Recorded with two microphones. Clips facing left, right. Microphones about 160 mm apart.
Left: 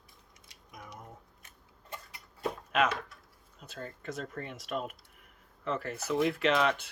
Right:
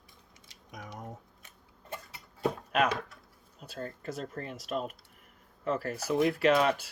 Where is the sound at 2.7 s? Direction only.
45° right (ahead or behind).